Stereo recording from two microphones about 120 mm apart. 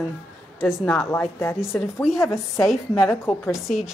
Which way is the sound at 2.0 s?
5° right (ahead or behind).